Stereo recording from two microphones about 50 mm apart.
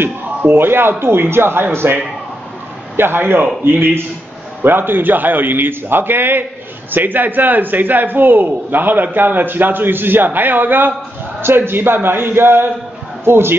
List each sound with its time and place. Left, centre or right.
0.5 s a man's voice: right
3.0 s a man's voice: right